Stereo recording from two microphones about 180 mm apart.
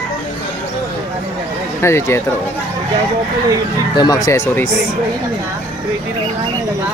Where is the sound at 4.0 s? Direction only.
20° left (ahead or behind).